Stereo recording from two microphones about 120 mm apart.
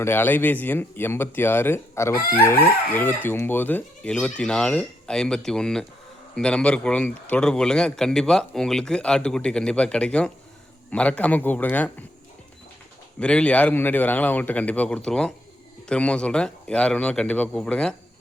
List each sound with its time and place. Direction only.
0.0 s a man's voice: 20° left (ahead or behind)
13.1 s a man's voice: 10° left (ahead or behind)